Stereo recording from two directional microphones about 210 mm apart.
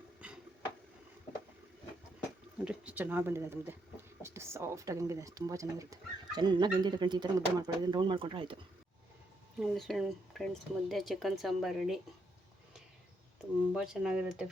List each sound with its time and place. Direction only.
2.6 s speech: 5° right (ahead or behind); by 8.5 s 25° right (ahead or behind)
9.6 s speech: centre (ahead or behind)
13.7 s speech: 5° right (ahead or behind)